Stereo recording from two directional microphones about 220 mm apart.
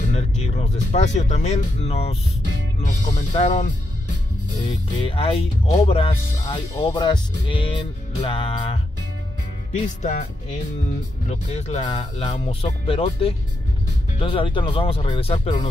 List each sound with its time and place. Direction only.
0.1 s speech: 30° left (ahead or behind)
4.9 s speech: 25° left (ahead or behind)
9.8 s speech: 35° left (ahead or behind)
11.2 s speech: 30° left (ahead or behind)